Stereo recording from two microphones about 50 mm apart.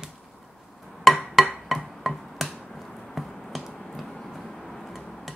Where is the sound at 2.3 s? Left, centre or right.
Centre.